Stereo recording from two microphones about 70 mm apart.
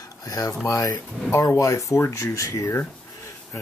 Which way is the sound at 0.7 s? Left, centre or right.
Left.